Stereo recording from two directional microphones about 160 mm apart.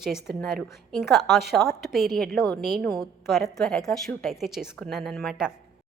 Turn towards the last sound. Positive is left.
turn(degrees=0)  # may be behind; listen again after turning